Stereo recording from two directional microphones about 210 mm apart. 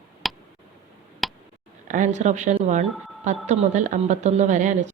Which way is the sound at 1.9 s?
35° right (ahead or behind).